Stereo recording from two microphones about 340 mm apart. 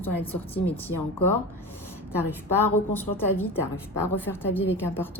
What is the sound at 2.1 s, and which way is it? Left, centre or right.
A woman's voice, centre.